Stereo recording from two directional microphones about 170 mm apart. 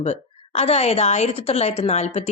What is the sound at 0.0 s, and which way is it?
A woman's voice, 40° left (ahead or behind).